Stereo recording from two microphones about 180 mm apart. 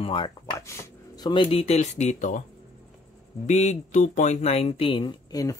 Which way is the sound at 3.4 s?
40° left (ahead or behind).